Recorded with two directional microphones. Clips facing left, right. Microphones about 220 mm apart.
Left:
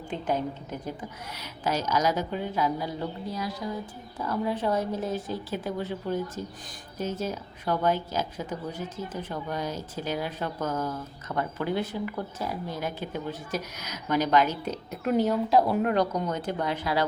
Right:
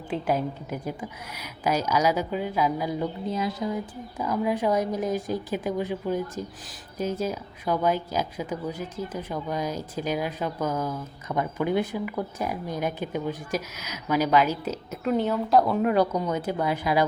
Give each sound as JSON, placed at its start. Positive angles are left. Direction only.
{"t": 0.1, "sound": "a woman's voice", "side_deg": -10}
{"t": 4.2, "sound": "a woman's voice", "side_deg": -10}